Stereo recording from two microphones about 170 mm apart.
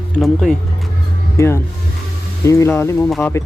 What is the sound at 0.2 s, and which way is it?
Speech, centre (ahead or behind).